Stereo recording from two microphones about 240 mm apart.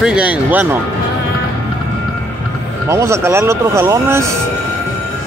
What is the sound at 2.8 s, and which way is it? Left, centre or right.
Speech, centre.